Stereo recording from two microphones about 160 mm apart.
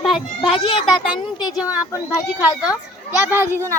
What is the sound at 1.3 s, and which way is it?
Speech, 25° left (ahead or behind).